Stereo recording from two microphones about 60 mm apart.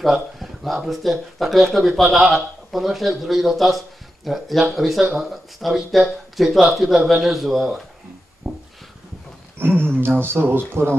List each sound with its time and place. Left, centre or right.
0.0 s speech: centre
8.5 s a sound: centre
9.8 s speech: right